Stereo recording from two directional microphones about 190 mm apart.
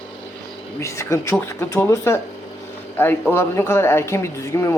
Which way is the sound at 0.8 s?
15° left (ahead or behind).